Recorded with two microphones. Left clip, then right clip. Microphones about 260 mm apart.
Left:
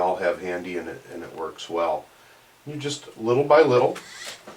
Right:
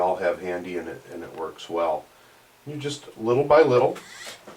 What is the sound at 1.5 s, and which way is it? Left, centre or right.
Speech, centre.